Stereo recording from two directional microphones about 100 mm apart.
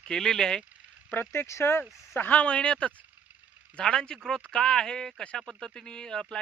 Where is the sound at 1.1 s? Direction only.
20° left (ahead or behind).